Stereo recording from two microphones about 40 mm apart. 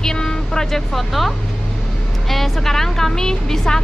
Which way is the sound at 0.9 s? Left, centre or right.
Centre.